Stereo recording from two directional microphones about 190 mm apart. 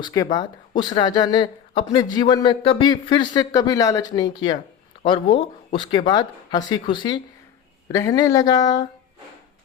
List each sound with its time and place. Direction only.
0.0 s speech: 20° left (ahead or behind)